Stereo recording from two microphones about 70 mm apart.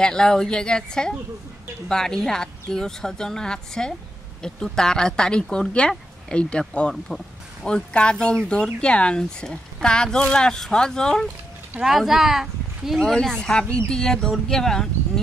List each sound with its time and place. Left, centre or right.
0.0 s speech: centre
11.8 s speech: centre
13.0 s speech: centre